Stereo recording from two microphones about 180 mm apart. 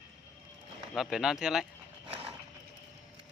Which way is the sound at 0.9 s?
Centre (ahead or behind).